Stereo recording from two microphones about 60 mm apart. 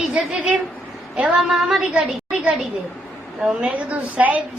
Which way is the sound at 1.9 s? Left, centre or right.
Centre.